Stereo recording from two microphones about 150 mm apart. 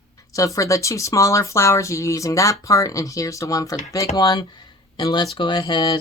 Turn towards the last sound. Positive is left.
turn(degrees=30)  # may be behind; listen again after turning